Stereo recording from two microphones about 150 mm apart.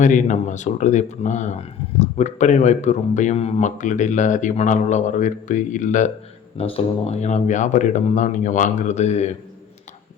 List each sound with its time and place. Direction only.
0.0 s speech: 55° left (ahead or behind)
6.6 s speech: 40° left (ahead or behind)